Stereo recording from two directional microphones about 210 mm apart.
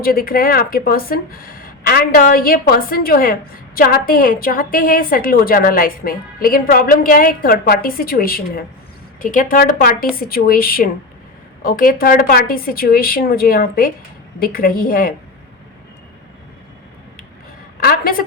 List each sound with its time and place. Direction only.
0.0 s a woman's voice: 45° left (ahead or behind)
17.7 s a woman's voice: 45° left (ahead or behind)